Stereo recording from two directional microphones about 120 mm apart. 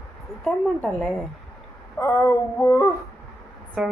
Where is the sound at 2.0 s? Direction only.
20° left (ahead or behind).